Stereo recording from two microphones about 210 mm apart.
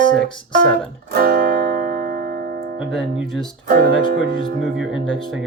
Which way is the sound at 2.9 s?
Centre (ahead or behind).